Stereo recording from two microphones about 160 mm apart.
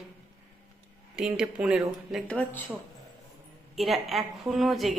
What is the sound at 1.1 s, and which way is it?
A woman's voice, 5° right (ahead or behind).